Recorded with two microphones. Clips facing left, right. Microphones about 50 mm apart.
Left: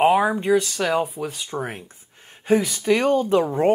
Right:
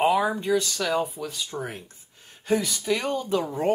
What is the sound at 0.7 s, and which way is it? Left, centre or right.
Speech, left.